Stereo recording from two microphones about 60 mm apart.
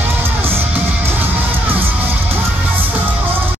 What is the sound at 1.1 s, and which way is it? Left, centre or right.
Music, right.